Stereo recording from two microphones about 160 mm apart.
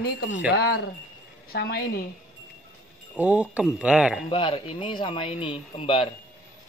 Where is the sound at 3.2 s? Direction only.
5° right (ahead or behind).